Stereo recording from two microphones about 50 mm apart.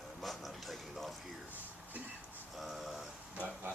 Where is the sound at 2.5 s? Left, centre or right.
Centre.